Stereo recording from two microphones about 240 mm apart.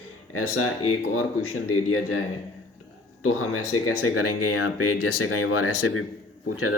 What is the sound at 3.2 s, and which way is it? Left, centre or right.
Speech, left.